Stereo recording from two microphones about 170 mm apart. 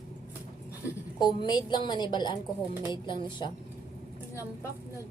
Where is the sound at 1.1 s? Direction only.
25° left (ahead or behind).